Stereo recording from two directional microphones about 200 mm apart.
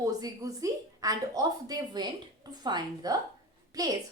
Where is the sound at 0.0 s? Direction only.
15° right (ahead or behind).